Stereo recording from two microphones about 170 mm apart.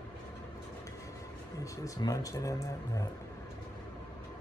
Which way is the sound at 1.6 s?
20° left (ahead or behind).